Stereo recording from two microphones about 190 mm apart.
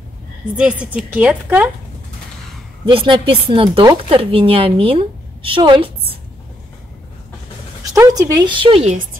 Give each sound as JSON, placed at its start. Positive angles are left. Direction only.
{"t": 0.6, "sound": "a woman's voice", "side_deg": -5}
{"t": 2.8, "sound": "a woman's voice", "side_deg": -25}
{"t": 7.9, "sound": "speech", "side_deg": -20}